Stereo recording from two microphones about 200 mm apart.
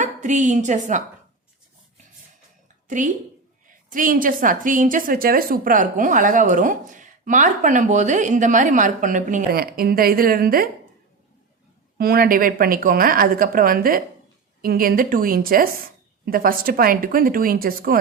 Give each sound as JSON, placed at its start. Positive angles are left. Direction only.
{"t": 0.0, "sound": "a woman's voice", "side_deg": -40}
{"t": 2.8, "sound": "a woman's voice", "side_deg": -40}
{"t": 11.9, "sound": "speech", "side_deg": -50}